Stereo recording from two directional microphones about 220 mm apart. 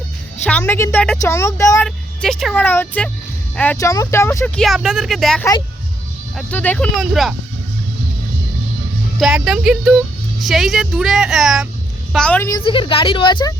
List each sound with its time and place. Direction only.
0.4 s a woman's voice: 5° left (ahead or behind)
9.1 s speech: centre (ahead or behind); by 13.5 s 20° left (ahead or behind)